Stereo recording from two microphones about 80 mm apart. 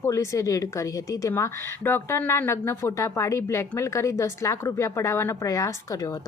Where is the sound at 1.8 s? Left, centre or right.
Left.